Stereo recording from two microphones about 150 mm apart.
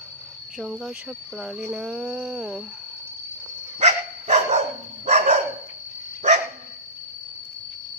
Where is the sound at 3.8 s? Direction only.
50° right (ahead or behind).